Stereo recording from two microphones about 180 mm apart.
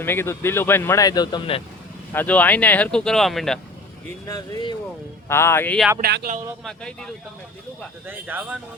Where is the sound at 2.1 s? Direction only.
10° left (ahead or behind).